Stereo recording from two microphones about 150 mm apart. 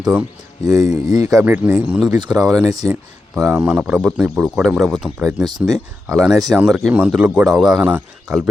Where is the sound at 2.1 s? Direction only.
25° right (ahead or behind).